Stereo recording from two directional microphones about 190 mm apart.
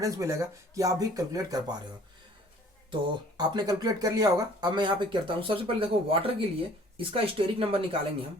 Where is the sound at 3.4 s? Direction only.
20° right (ahead or behind).